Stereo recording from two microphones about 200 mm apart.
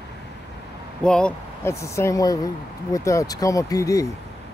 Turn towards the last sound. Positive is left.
turn(degrees=15)  # may be behind; listen again after turning